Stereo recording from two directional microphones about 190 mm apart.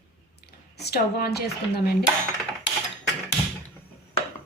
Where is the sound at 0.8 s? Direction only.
55° left (ahead or behind).